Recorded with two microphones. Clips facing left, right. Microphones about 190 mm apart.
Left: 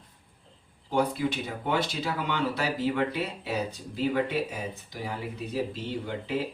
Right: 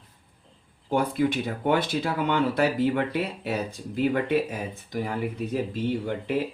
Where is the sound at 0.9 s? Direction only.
55° right (ahead or behind).